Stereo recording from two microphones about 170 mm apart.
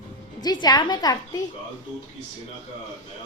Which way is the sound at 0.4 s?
25° left (ahead or behind).